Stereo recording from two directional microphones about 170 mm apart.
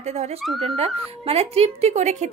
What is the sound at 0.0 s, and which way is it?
Speech, 40° right (ahead or behind).